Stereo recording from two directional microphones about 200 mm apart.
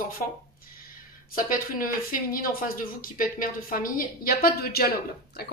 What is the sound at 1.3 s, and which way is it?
Speech, 45° left (ahead or behind).